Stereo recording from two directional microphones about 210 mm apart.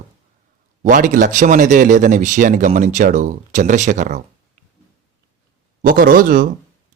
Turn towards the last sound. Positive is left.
turn(degrees=-40)  # may be behind; listen again after turning